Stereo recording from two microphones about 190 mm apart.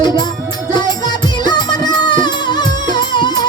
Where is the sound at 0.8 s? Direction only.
20° left (ahead or behind).